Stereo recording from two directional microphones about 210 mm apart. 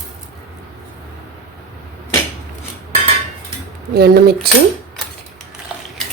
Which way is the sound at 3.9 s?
50° right (ahead or behind).